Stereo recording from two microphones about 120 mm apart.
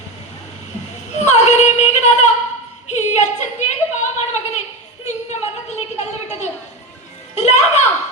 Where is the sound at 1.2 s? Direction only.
70° left (ahead or behind).